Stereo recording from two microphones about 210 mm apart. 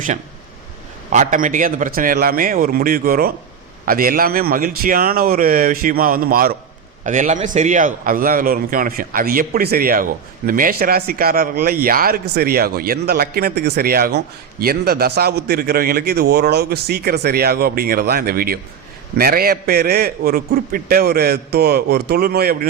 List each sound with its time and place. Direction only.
1.1 s a man's voice: 35° right (ahead or behind)